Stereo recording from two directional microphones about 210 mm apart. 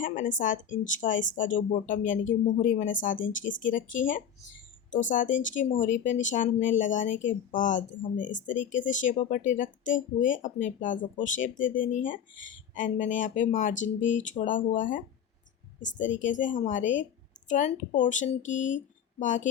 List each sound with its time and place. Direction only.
0.0 s speech: 40° left (ahead or behind)
16.0 s speech: 35° left (ahead or behind)